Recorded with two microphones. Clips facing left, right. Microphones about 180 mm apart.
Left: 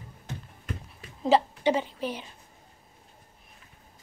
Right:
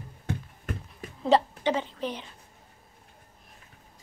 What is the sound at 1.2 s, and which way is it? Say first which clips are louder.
A woman's voice: left 1 dB; 5° left (ahead or behind).